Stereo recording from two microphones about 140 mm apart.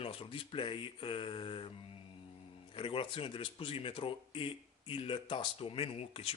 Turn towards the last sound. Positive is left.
turn(degrees=45)  # may be behind; listen again after turning